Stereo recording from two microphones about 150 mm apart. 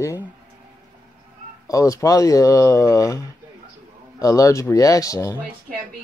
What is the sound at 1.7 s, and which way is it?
Speech, 20° left (ahead or behind).